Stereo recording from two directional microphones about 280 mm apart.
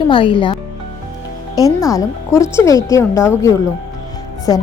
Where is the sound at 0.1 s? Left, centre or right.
Centre.